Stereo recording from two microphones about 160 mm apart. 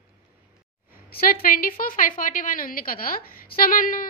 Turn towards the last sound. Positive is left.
turn(degrees=60)  # may be behind; listen again after turning